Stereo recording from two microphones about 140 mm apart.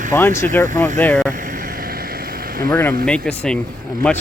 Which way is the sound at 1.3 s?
75° right (ahead or behind).